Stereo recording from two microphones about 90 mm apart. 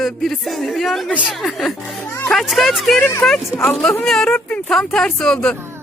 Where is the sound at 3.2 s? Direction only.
10° left (ahead or behind).